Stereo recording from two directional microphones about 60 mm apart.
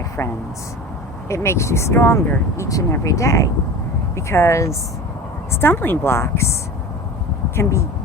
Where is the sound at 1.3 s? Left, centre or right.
Left.